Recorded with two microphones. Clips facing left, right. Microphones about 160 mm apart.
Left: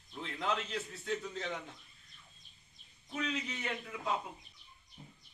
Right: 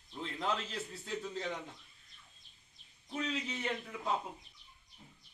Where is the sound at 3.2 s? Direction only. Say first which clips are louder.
Even; 30° right (ahead or behind).